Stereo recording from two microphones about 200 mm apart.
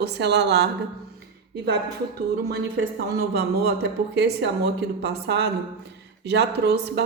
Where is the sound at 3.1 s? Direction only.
55° right (ahead or behind).